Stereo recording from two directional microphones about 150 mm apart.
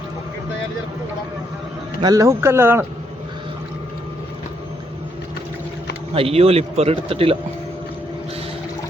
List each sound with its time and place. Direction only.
2.0 s speech: 25° right (ahead or behind)
6.1 s speech: 40° right (ahead or behind)